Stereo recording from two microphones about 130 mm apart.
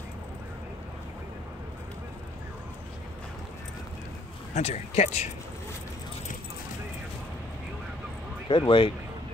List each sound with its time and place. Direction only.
4.6 s speech: 55° left (ahead or behind)
8.5 s speech: 40° left (ahead or behind)